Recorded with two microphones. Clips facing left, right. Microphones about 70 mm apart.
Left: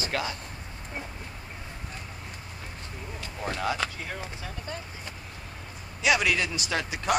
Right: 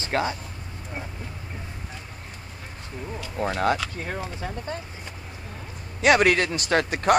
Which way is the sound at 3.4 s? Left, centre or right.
Right.